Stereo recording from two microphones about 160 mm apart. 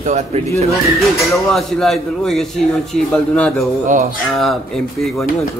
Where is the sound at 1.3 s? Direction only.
Centre (ahead or behind).